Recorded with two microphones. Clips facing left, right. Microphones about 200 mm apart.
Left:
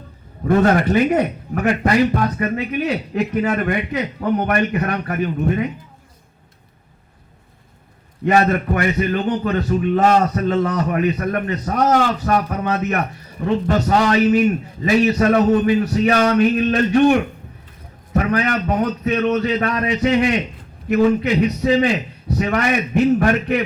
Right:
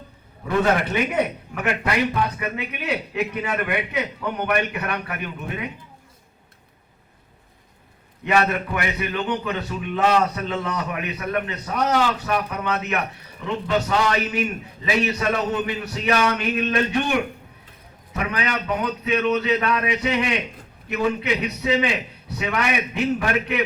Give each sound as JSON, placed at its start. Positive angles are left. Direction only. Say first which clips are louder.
{"t": 0.4, "sound": "a man's voice", "louder": "left 6 dB", "side_deg": 45}
{"t": 8.2, "sound": "a man's voice", "louder": "left 5 dB", "side_deg": 40}
{"t": 21.6, "sound": "a man's voice", "louder": "left 6 dB", "side_deg": 40}